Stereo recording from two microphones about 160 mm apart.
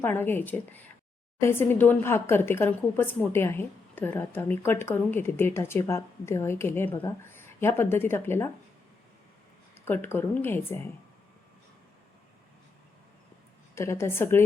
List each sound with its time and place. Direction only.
0.0 s a woman's voice: 15° left (ahead or behind)
9.7 s a woman's voice: 15° left (ahead or behind)
13.7 s a woman's voice: 15° left (ahead or behind)